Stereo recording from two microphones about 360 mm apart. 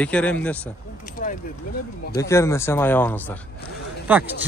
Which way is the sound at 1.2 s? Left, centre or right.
Left.